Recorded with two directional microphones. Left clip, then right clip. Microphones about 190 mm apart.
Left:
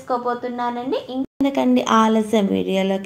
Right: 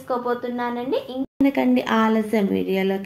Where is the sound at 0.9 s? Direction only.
30° left (ahead or behind).